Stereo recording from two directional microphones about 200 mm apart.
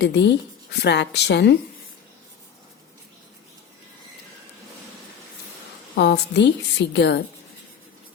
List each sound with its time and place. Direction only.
0.0 s speech: 60° left (ahead or behind)
6.0 s speech: 60° left (ahead or behind)